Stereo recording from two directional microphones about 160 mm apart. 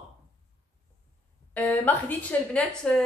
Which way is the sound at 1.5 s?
10° left (ahead or behind).